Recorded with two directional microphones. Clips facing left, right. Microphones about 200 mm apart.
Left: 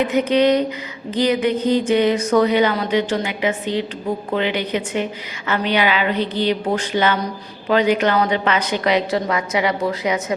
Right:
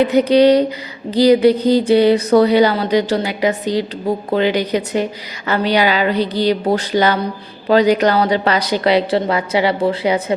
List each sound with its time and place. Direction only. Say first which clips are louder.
0.0 s a woman's voice: right 5 dB; 35° right (ahead or behind)